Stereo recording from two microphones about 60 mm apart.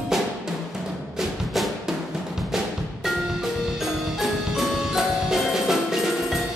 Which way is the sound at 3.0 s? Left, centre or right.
Centre.